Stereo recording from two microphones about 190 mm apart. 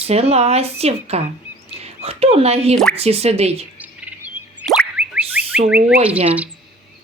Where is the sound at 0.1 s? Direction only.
35° right (ahead or behind).